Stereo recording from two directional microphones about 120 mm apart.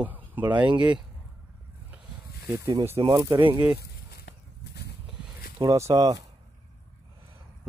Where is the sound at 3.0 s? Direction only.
40° right (ahead or behind).